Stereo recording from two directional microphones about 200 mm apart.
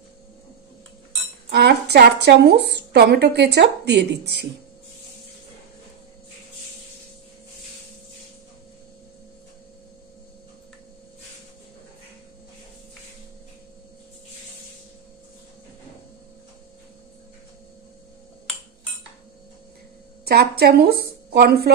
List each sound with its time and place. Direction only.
1.5 s a woman's voice: 55° right (ahead or behind)
20.2 s a woman's voice: 55° right (ahead or behind)